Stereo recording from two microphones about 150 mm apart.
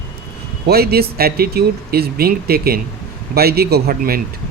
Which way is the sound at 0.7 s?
90° right.